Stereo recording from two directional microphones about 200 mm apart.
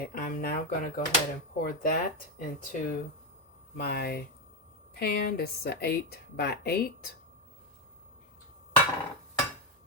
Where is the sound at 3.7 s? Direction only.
50° left (ahead or behind).